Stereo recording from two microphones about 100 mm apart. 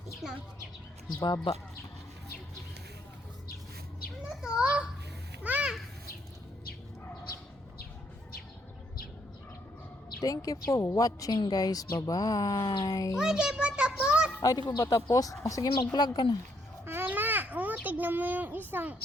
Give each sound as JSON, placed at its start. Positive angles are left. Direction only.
{"t": 0.2, "sound": "a woman's voice", "side_deg": -5}
{"t": 1.2, "sound": "a woman's voice", "side_deg": 45}
{"t": 4.3, "sound": "a child's voice", "side_deg": -5}
{"t": 10.2, "sound": "a woman's voice", "side_deg": 35}
{"t": 13.1, "sound": "a child's voice", "side_deg": -5}
{"t": 14.8, "sound": "a woman's voice", "side_deg": 40}
{"t": 16.0, "sound": "a woman's voice", "side_deg": 45}
{"t": 16.8, "sound": "babbling", "side_deg": -20}